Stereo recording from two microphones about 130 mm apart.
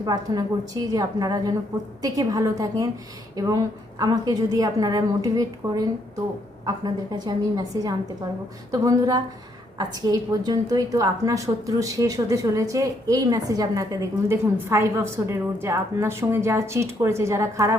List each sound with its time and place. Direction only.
0.0 s a woman's voice: 30° right (ahead or behind)